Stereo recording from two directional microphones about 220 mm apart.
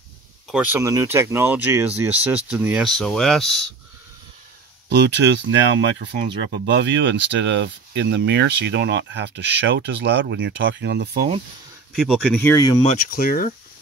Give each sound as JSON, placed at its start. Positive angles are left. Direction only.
{"t": 0.5, "sound": "speech", "side_deg": -5}
{"t": 4.8, "sound": "speech", "side_deg": -50}
{"t": 11.9, "sound": "speech", "side_deg": 0}
{"t": 12.8, "sound": "speech", "side_deg": 40}